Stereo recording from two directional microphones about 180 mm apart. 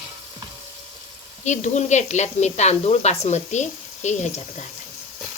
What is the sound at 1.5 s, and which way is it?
Speech, 40° left (ahead or behind).